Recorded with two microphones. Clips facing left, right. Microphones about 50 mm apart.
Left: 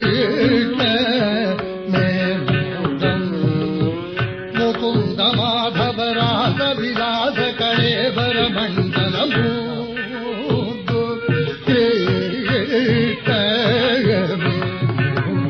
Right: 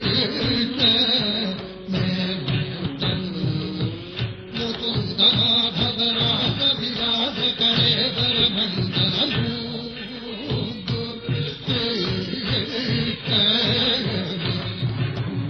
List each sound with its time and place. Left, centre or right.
0.0 s music: left
2.4 s music: left
3.3 s music: left
11.3 s music: left